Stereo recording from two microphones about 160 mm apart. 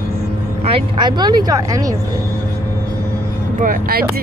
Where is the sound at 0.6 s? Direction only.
30° right (ahead or behind).